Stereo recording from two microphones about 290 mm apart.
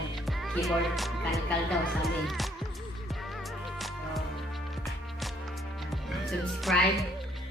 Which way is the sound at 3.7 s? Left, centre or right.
Centre.